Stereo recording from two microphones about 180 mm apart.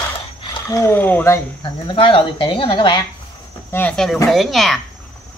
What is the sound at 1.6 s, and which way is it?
Speech, 25° left (ahead or behind).